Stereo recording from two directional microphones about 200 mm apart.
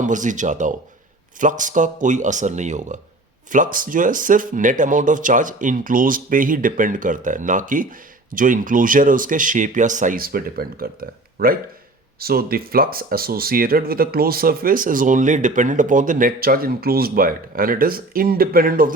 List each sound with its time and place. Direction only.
0.0 s speech: 40° right (ahead or behind)